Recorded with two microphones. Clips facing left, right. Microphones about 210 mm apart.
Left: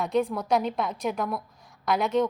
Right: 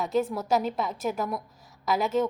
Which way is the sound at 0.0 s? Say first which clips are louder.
Left 1 dB; centre (ahead or behind).